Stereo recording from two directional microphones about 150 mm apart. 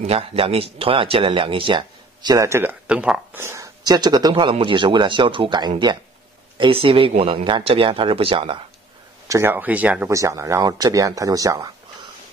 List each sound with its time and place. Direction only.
0.0 s speech: 40° right (ahead or behind)
2.3 s speech: 20° right (ahead or behind)
2.9 s speech: 5° right (ahead or behind); by 8.5 s 40° right (ahead or behind)
9.3 s speech: 15° right (ahead or behind)
10.0 s speech: 20° right (ahead or behind)